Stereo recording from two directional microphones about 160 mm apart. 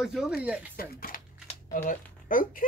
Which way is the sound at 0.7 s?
65° left (ahead or behind).